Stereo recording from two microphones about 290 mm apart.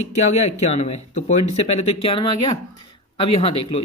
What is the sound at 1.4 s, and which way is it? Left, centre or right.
Speech, left.